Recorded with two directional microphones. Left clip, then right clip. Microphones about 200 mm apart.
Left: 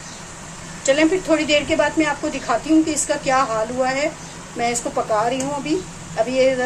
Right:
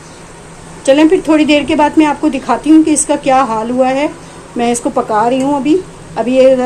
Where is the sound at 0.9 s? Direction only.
40° right (ahead or behind).